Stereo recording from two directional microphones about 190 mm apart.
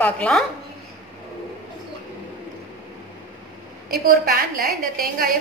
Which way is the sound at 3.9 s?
55° right (ahead or behind).